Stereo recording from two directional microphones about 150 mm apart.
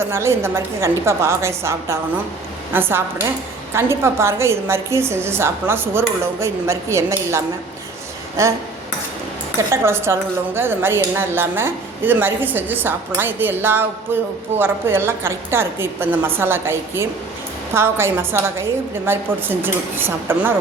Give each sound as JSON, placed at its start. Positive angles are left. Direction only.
{"t": 0.1, "sound": "a woman's voice", "side_deg": -15}
{"t": 9.6, "sound": "a woman's voice", "side_deg": -15}